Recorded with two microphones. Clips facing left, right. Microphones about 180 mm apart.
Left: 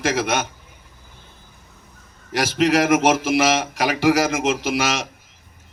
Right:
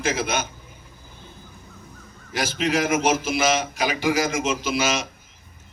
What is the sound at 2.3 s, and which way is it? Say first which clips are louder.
A man's voice: left 5 dB; 75° left (ahead or behind).